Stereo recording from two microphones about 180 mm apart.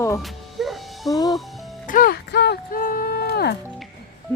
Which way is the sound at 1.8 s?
50° left (ahead or behind).